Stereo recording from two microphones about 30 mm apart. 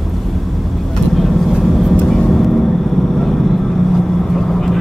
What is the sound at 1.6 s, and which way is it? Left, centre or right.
Vehicle, centre.